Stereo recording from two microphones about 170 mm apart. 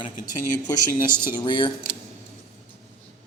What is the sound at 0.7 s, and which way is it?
Speech, 25° left (ahead or behind).